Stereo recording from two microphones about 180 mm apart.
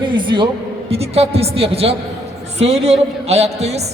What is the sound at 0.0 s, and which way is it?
A man's voice, 25° right (ahead or behind).